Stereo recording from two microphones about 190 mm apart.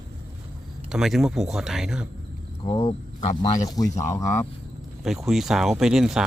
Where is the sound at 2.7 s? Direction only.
20° left (ahead or behind).